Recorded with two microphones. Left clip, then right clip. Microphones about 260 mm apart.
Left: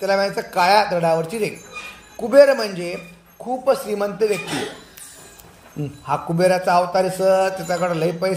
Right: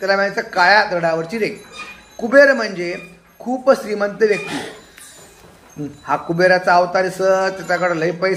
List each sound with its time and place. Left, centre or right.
0.0 s a man's voice: left
6.0 s a man's voice: left